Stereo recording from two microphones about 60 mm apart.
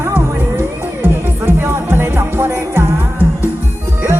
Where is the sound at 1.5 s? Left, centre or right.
Right.